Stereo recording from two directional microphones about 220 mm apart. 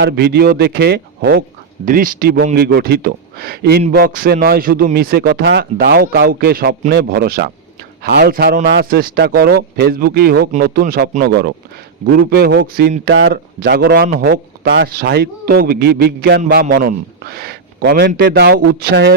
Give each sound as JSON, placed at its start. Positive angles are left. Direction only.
{"t": 0.0, "sound": "a man's voice", "side_deg": -50}